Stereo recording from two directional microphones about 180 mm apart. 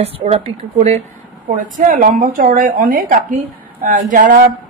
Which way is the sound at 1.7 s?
50° right (ahead or behind).